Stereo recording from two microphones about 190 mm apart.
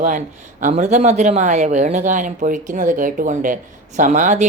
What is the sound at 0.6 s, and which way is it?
Speech, 40° right (ahead or behind).